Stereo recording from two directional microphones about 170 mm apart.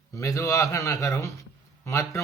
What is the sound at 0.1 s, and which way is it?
A man's voice, 20° left (ahead or behind).